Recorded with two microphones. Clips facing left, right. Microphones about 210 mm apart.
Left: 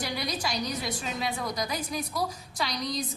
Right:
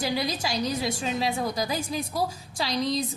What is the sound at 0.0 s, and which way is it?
A woman's voice, 25° right (ahead or behind).